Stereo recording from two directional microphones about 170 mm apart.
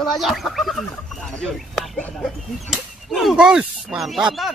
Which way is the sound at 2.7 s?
Centre (ahead or behind).